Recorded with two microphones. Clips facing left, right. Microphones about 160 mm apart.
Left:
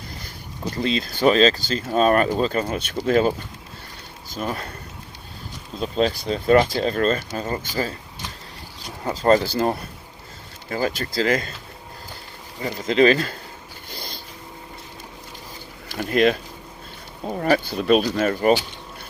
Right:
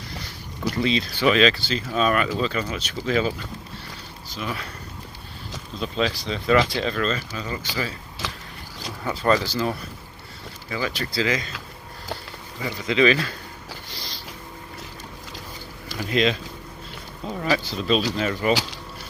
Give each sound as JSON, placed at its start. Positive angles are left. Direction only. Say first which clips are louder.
{"t": 0.8, "sound": "speech", "louder": "left 2 dB", "side_deg": 45}
{"t": 5.8, "sound": "speech", "louder": "left 4 dB", "side_deg": 45}
{"t": 8.2, "sound": "a sound", "louder": "right 4 dB", "side_deg": -90}
{"t": 9.0, "sound": "speech", "louder": "left 4 dB", "side_deg": 40}
{"t": 12.6, "sound": "speech", "louder": "left 3 dB", "side_deg": 40}
{"t": 13.9, "sound": "a sound", "louder": "left 3 dB", "side_deg": 50}
{"t": 15.9, "sound": "speech", "louder": "left 4 dB", "side_deg": 50}